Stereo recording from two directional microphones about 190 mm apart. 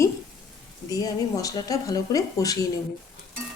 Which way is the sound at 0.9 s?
20° left (ahead or behind).